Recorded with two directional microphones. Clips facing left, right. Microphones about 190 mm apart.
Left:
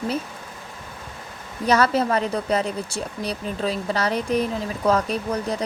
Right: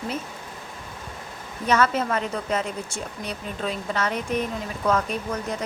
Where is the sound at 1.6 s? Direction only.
35° left (ahead or behind).